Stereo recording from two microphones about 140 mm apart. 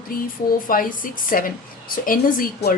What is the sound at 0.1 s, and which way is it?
Speech, 85° left.